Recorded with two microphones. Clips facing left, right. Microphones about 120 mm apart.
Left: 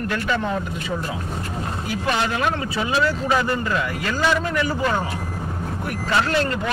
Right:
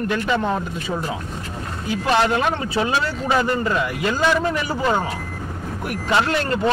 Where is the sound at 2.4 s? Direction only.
25° right (ahead or behind).